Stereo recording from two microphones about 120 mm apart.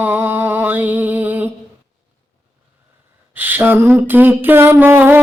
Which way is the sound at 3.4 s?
15° right (ahead or behind).